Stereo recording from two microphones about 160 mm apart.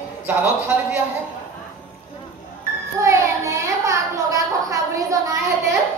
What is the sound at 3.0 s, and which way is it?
A child's voice, 20° right (ahead or behind).